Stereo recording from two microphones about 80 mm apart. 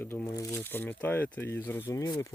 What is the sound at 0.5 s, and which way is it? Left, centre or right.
Speech, left.